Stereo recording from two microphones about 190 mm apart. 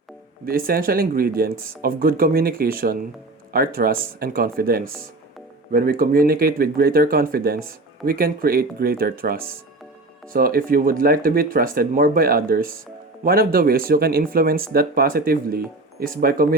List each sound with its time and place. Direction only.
0.4 s speech: 50° right (ahead or behind)